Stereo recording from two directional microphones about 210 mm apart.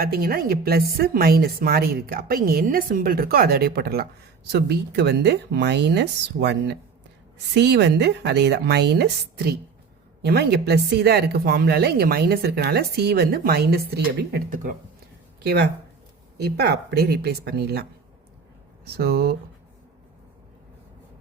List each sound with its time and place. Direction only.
0.0 s speech: 45° right (ahead or behind)
10.2 s speech: 50° right (ahead or behind)
15.4 s speech: 55° right (ahead or behind)
18.9 s speech: 45° right (ahead or behind)